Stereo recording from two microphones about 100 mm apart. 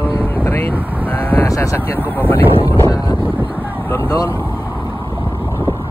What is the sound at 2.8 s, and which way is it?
Wind noise, 40° left (ahead or behind).